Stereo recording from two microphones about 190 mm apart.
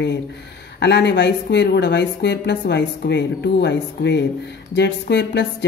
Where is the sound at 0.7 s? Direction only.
65° left (ahead or behind).